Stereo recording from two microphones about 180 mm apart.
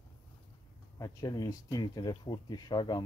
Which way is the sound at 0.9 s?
20° left (ahead or behind).